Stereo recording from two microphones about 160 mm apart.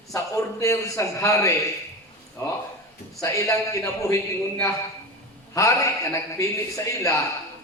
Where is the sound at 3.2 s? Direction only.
20° left (ahead or behind).